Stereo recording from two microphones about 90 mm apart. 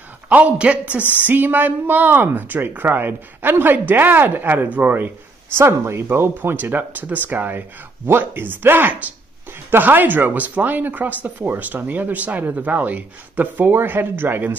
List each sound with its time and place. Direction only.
0.3 s speech: 15° right (ahead or behind)